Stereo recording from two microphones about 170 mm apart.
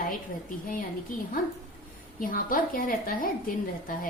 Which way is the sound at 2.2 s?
55° left (ahead or behind).